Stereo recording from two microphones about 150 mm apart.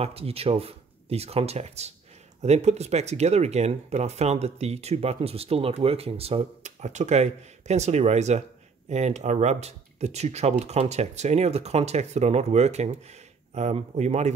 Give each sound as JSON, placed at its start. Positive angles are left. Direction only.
{"t": 0.0, "sound": "speech", "side_deg": -40}